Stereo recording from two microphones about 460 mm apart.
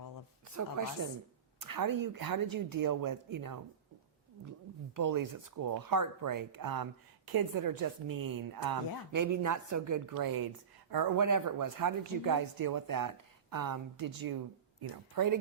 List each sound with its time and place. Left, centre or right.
0.4 s a woman's voice: right
4.9 s speech: right